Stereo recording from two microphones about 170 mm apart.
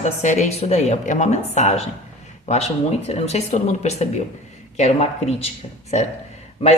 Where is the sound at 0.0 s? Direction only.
40° left (ahead or behind).